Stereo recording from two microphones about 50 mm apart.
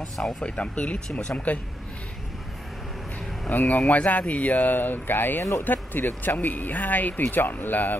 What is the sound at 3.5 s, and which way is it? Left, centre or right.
Speech, left.